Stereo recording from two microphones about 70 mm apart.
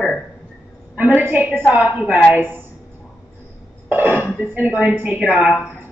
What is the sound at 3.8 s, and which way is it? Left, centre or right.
Speech, right.